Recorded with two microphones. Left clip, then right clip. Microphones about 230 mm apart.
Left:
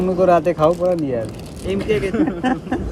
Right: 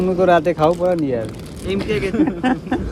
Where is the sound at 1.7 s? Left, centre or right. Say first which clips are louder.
Even; right.